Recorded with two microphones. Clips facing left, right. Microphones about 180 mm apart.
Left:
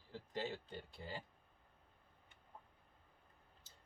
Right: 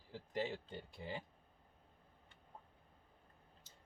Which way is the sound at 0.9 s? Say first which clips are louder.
Right 3 dB; 15° right (ahead or behind).